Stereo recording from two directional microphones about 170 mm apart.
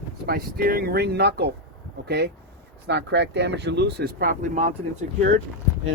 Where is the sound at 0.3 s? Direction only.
65° right (ahead or behind); by 4.7 s 45° right (ahead or behind).